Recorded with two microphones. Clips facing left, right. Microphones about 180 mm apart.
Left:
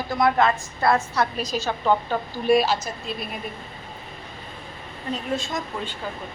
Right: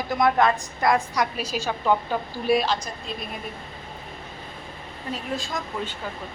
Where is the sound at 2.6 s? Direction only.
5° left (ahead or behind).